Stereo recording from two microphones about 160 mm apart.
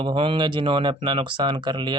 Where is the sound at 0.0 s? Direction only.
35° right (ahead or behind).